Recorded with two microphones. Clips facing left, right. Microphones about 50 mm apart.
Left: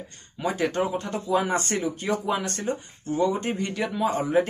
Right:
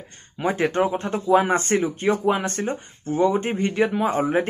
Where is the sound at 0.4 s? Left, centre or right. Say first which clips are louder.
Right 4 dB; right.